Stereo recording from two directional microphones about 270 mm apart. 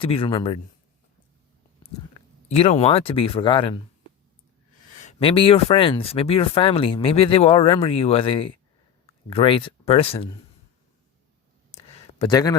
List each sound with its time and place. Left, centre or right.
0.0 s speech: centre
2.5 s speech: left
5.0 s speech: centre
11.7 s a sound: centre